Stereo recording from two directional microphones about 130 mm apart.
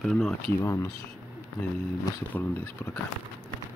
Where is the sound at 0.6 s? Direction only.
20° left (ahead or behind).